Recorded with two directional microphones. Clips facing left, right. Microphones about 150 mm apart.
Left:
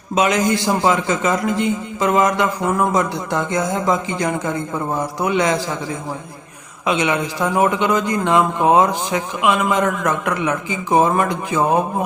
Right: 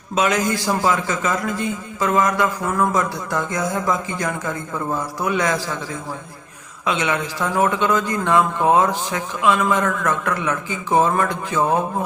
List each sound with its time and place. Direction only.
0.1 s a man's voice: 15° left (ahead or behind)
6.8 s a man's voice: 20° left (ahead or behind)